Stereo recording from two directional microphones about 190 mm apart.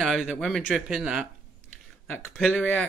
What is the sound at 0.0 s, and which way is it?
A man's voice, centre (ahead or behind).